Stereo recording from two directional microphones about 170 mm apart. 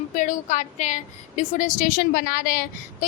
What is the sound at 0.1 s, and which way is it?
A woman's voice, 50° left (ahead or behind).